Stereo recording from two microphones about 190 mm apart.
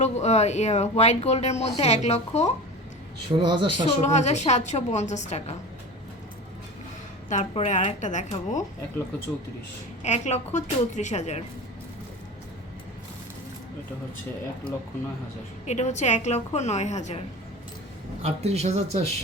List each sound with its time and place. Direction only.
0.0 s speech: 35° left (ahead or behind)
3.3 s speech: 25° right (ahead or behind)
3.8 s speech: 35° left (ahead or behind)
7.3 s speech: 35° left (ahead or behind)
10.0 s speech: 35° left (ahead or behind)
15.6 s speech: 35° left (ahead or behind)
18.2 s speech: 35° right (ahead or behind)